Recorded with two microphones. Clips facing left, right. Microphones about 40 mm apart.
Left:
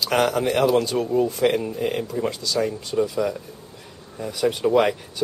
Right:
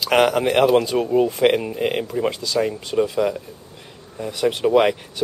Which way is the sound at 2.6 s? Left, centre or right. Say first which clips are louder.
Right 2 dB; right.